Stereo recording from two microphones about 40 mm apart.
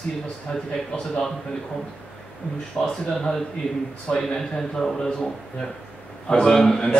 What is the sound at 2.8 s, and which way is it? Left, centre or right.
Speech, centre.